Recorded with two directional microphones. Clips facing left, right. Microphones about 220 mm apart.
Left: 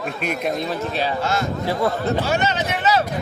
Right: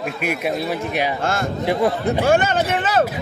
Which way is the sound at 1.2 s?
50° right (ahead or behind).